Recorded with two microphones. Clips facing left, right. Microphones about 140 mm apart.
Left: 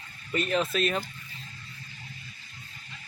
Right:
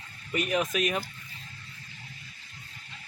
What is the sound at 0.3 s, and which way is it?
Speech, 15° right (ahead or behind).